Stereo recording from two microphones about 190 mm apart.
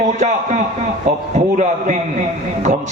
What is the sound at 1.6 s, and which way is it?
A man's voice, 40° right (ahead or behind).